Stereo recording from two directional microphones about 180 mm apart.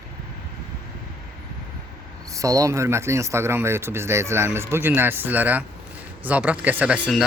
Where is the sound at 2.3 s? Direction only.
20° right (ahead or behind).